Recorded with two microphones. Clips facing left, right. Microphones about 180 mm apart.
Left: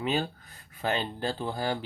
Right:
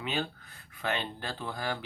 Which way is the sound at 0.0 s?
40° left (ahead or behind).